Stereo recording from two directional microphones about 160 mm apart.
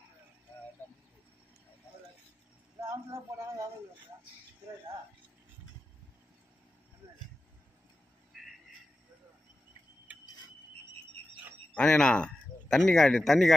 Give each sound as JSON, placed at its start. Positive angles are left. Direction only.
{"t": 2.9, "sound": "speech", "side_deg": -20}
{"t": 8.3, "sound": "a sound", "side_deg": -5}
{"t": 11.7, "sound": "speech", "side_deg": 5}